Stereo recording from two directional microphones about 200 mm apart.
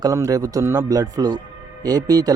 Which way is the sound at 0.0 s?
15° right (ahead or behind).